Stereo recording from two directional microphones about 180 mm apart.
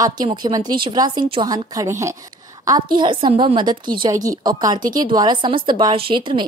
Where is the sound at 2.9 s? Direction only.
25° right (ahead or behind).